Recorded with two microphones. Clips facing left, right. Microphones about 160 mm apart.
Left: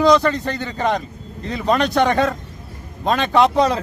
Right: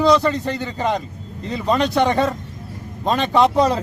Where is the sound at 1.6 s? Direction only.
30° right (ahead or behind).